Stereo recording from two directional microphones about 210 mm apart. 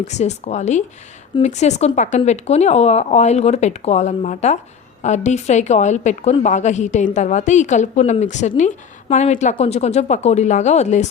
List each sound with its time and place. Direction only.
0.0 s a woman's voice: 35° left (ahead or behind)